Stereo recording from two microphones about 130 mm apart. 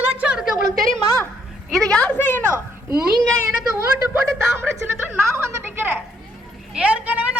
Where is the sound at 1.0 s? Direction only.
25° left (ahead or behind).